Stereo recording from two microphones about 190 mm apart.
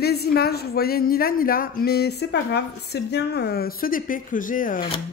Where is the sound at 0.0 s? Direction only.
55° left (ahead or behind).